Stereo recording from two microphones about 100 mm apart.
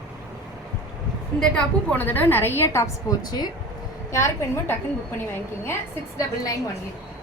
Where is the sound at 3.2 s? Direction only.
45° left (ahead or behind).